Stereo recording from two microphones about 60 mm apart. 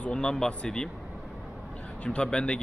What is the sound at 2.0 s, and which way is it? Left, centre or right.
Speech, centre.